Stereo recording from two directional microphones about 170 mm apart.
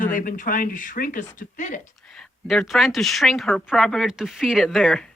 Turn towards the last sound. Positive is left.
turn(degrees=0)  # may be behind; listen again after turning